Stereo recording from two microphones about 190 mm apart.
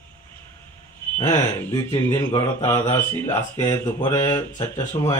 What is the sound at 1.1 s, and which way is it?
Speech, 15° left (ahead or behind).